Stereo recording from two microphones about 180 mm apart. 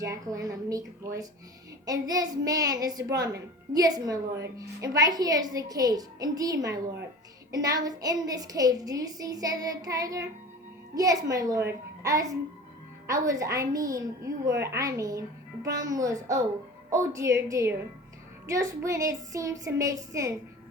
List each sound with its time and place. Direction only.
0.0 s a woman's voice: 20° right (ahead or behind)